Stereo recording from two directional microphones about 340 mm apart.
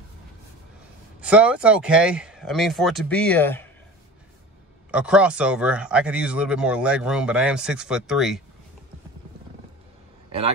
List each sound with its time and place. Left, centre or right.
1.2 s speech: centre
4.9 s speech: centre